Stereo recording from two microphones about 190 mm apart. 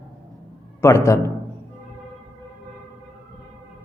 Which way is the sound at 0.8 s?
15° left (ahead or behind).